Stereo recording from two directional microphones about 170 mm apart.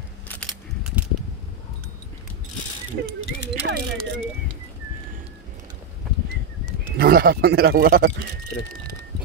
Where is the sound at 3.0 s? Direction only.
90° right.